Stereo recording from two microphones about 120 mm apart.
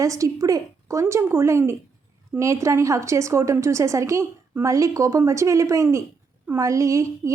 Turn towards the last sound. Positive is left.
turn(degrees=-25)  # may be behind; listen again after turning